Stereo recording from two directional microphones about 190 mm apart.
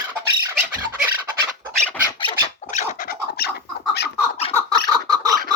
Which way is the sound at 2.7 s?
55° left (ahead or behind).